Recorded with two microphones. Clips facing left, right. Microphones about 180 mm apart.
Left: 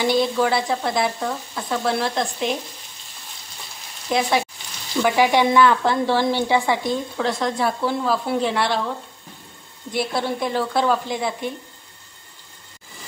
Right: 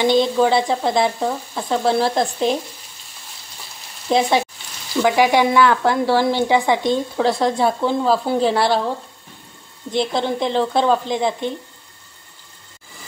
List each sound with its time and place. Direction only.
0.0 s a woman's voice: 25° right (ahead or behind)
4.1 s a woman's voice: 30° right (ahead or behind)
5.0 s a woman's voice: 15° right (ahead or behind); by 8.9 s 35° right (ahead or behind)
9.8 s a woman's voice: 20° right (ahead or behind)